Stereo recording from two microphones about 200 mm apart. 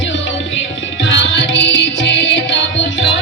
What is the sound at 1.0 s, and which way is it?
Music, 65° left (ahead or behind).